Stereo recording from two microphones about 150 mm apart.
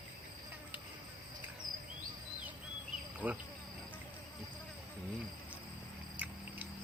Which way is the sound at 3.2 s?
10° right (ahead or behind).